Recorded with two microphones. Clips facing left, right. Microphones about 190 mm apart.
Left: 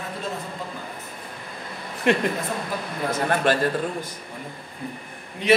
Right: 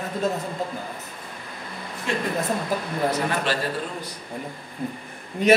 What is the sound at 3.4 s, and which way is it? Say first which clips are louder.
Speech: left 5 dB; 50° left (ahead or behind).